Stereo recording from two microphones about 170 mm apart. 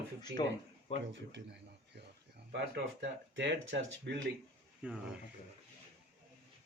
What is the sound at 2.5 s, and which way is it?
Speech, 90° right.